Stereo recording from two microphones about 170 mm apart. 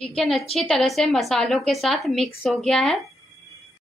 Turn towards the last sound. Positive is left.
turn(degrees=0)  # may be behind; listen again after turning